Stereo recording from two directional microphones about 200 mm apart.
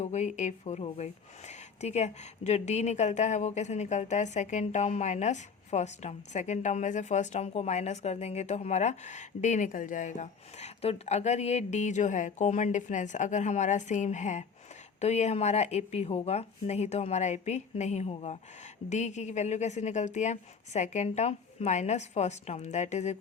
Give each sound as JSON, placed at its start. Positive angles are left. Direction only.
{"t": 0.0, "sound": "speech", "side_deg": 35}